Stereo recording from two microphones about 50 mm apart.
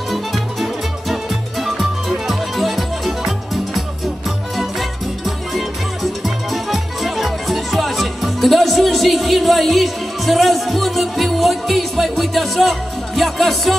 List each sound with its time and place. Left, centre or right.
0.1 s music: centre